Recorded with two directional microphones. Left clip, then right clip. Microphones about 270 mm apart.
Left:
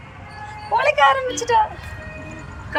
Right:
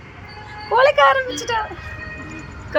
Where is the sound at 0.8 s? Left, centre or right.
Centre.